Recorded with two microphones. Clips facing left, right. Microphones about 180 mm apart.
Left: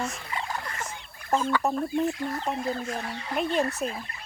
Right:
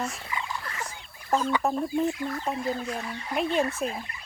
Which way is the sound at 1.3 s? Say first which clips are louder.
Even; centre (ahead or behind).